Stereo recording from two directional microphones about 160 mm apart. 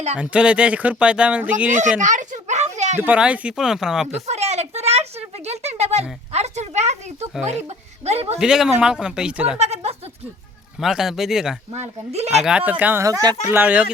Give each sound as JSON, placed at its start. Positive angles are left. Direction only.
{"t": 0.2, "sound": "speech", "side_deg": -5}
{"t": 2.0, "sound": "a sound", "side_deg": -50}
{"t": 3.0, "sound": "speech", "side_deg": -10}
{"t": 4.3, "sound": "a sound", "side_deg": -45}
{"t": 7.4, "sound": "speech", "side_deg": -45}
{"t": 8.4, "sound": "speech", "side_deg": -5}
{"t": 9.6, "sound": "a sound", "side_deg": -40}
{"t": 10.8, "sound": "speech", "side_deg": 0}
{"t": 11.7, "sound": "speech", "side_deg": -45}
{"t": 12.4, "sound": "speech", "side_deg": -5}